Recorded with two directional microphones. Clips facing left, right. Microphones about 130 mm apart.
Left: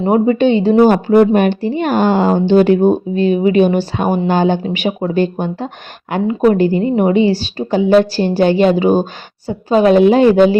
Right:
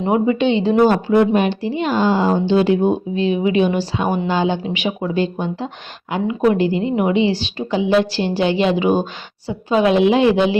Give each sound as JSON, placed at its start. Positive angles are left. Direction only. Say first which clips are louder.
{"t": 0.0, "sound": "a woman's voice", "louder": "left 4 dB", "side_deg": 40}